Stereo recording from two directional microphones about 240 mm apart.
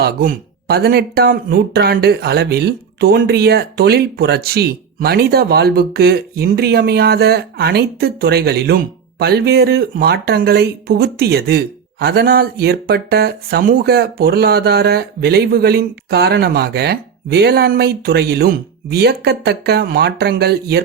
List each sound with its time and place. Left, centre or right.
0.0 s speech: right